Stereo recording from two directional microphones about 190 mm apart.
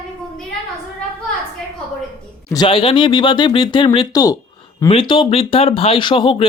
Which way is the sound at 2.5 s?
25° left (ahead or behind).